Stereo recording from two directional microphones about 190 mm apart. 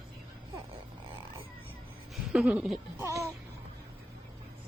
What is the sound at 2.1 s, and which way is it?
Speech, 5° right (ahead or behind).